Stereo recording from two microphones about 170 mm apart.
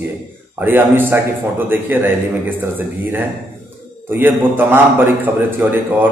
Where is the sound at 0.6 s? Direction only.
10° right (ahead or behind).